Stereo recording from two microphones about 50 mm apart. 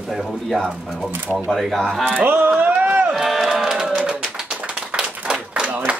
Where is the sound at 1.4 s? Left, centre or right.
Centre.